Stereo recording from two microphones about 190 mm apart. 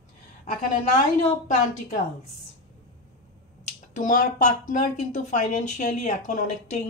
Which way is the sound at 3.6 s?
40° left (ahead or behind).